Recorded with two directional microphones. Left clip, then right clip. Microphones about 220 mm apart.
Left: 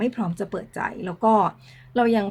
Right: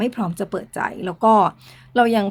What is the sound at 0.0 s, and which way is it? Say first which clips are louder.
Speech: right 3 dB; 45° right (ahead or behind).